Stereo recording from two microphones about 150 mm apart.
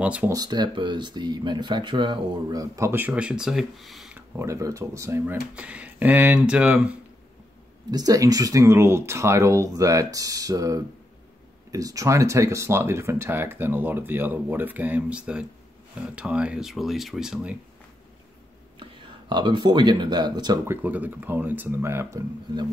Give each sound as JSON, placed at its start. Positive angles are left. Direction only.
{"t": 0.0, "sound": "speech", "side_deg": -10}
{"t": 0.3, "sound": "speech", "side_deg": -25}
{"t": 4.4, "sound": "speech", "side_deg": -20}
{"t": 7.9, "sound": "speech", "side_deg": -25}
{"t": 18.8, "sound": "speech", "side_deg": -30}
{"t": 20.6, "sound": "speech", "side_deg": -15}